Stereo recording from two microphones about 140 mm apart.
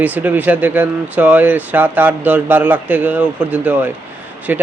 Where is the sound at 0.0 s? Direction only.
15° right (ahead or behind).